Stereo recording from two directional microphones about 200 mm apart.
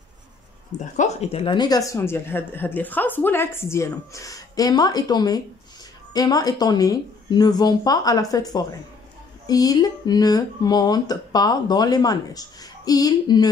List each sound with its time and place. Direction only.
0.7 s speech: 35° left (ahead or behind); by 13.5 s 20° left (ahead or behind)